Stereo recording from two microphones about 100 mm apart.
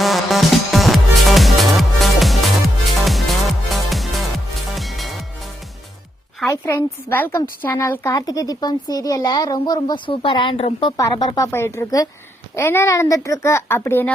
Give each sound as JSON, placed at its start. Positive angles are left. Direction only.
{"t": 0.0, "sound": "music", "side_deg": 0}
{"t": 6.5, "sound": "speech", "side_deg": 25}
{"t": 11.3, "sound": "speech", "side_deg": 25}